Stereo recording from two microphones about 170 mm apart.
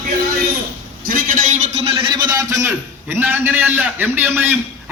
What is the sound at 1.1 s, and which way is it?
A man's voice, 50° right (ahead or behind).